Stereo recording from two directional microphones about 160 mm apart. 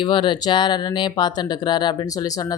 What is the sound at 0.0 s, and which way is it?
Speech, 30° left (ahead or behind).